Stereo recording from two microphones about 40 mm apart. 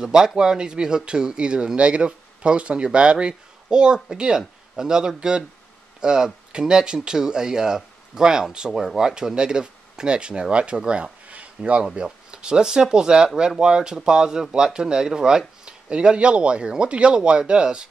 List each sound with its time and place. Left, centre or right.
0.0 s speech: centre
10.9 s a sound: right
11.9 s speech: right